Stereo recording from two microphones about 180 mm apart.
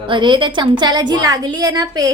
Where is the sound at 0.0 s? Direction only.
25° right (ahead or behind).